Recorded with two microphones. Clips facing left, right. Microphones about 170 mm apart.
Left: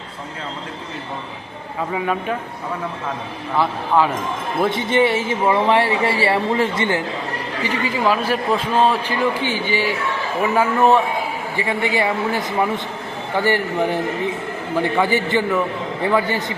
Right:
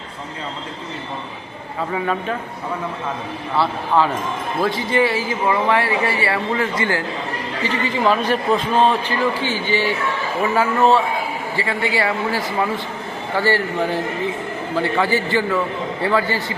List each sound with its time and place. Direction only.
3.6 s a man's voice: 10° left (ahead or behind)
4.6 s speech: 20° left (ahead or behind)
7.6 s a man's voice: 10° left (ahead or behind)